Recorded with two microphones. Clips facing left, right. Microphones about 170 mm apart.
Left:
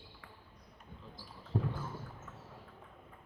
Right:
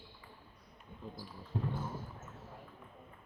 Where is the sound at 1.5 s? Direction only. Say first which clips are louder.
Left 2 dB; 40° left (ahead or behind).